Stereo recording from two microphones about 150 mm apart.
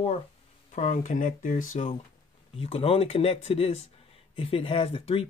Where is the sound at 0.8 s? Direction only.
60° left (ahead or behind).